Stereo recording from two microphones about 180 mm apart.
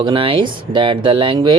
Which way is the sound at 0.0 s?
30° right (ahead or behind).